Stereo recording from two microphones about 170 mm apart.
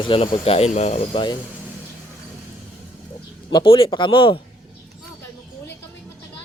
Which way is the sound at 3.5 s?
30° left (ahead or behind).